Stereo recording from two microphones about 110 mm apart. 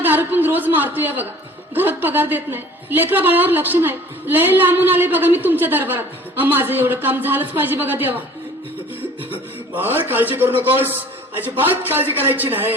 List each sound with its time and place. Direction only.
0.0 s a sound: 15° right (ahead or behind)
1.7 s a woman's voice: 20° right (ahead or behind)
9.7 s a woman's voice: 20° right (ahead or behind)